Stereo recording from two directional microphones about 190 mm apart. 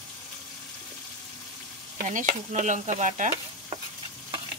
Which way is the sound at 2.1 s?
40° right (ahead or behind).